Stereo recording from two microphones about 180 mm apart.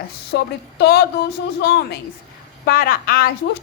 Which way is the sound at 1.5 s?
65° left (ahead or behind).